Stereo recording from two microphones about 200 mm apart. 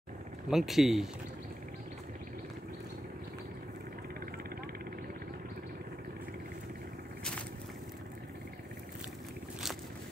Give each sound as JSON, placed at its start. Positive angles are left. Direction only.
{"t": 0.5, "sound": "speech", "side_deg": 0}